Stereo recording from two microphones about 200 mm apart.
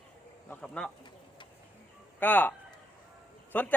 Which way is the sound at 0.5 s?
5° left (ahead or behind).